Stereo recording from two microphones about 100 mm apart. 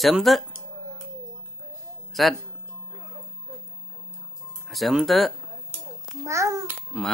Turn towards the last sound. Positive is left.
turn(degrees=-10)  # may be behind; listen again after turning